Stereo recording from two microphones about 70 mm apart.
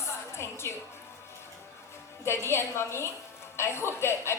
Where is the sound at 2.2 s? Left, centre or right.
Left.